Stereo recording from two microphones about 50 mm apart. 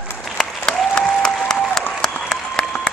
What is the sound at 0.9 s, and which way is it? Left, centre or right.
Applause, centre.